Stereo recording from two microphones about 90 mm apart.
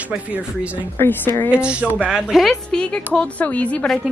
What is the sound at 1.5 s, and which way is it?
A woman's voice, 10° right (ahead or behind).